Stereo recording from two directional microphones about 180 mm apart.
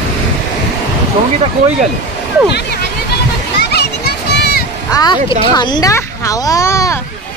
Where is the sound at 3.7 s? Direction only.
60° left (ahead or behind).